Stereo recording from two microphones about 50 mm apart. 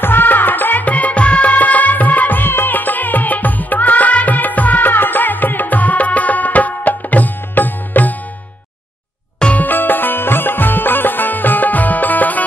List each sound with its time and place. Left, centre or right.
0.0 s music: left
9.6 s music: left